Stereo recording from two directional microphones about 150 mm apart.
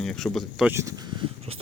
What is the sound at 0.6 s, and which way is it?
Speech, 20° right (ahead or behind).